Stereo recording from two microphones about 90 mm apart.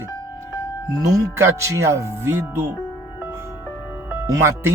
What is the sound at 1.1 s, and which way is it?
Speech, 30° right (ahead or behind).